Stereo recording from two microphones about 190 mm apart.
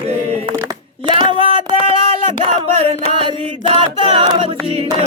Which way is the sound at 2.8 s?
30° right (ahead or behind).